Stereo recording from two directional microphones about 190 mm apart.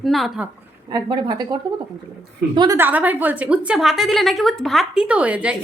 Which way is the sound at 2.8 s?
10° right (ahead or behind).